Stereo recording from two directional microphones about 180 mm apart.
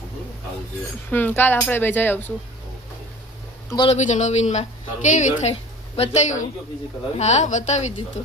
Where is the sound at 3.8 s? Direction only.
40° left (ahead or behind).